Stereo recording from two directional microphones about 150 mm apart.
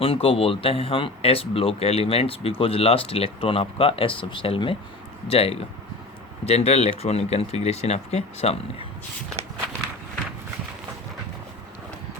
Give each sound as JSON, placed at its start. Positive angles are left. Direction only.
{"t": 0.0, "sound": "speech", "side_deg": 40}